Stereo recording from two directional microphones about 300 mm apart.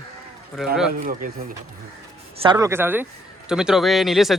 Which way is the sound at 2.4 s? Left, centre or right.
Centre.